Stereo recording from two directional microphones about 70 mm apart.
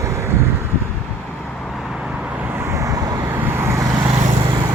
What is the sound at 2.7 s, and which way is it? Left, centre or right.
Vehicle, right.